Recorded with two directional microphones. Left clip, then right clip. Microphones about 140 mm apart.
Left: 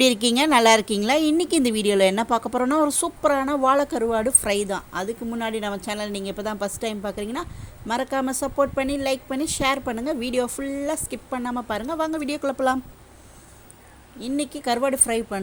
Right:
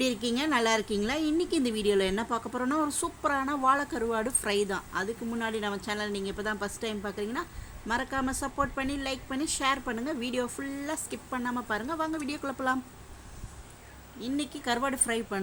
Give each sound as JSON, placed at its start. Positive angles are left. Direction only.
{"t": 0.0, "sound": "speech", "side_deg": 60}
{"t": 14.2, "sound": "a woman's voice", "side_deg": 30}